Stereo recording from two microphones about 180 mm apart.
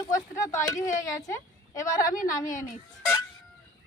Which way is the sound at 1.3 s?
15° left (ahead or behind).